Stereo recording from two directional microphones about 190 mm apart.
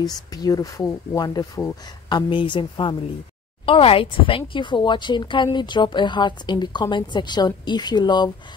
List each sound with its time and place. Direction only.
0.0 s a woman's voice: 20° left (ahead or behind)